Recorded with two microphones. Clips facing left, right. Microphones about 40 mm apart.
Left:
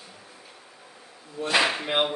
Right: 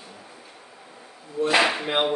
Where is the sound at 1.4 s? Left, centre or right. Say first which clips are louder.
Right 2 dB; centre.